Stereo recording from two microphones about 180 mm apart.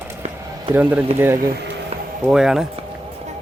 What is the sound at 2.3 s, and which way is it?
Speech, 5° right (ahead or behind).